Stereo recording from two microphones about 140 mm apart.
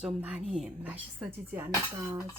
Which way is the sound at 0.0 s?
10° right (ahead or behind).